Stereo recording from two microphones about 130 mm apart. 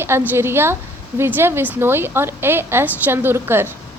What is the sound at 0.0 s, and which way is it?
A woman's voice, 20° right (ahead or behind).